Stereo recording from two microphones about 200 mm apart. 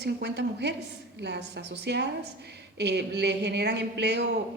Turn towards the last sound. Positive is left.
turn(degrees=-55)  # may be behind; listen again after turning